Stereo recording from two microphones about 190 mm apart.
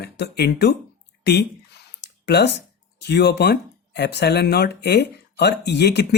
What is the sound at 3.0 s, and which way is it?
Speech, 60° left (ahead or behind).